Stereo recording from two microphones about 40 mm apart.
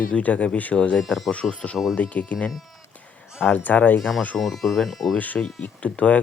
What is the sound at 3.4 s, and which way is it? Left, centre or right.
Speech, left.